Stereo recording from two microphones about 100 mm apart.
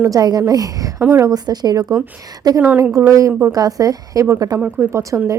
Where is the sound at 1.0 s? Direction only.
25° right (ahead or behind).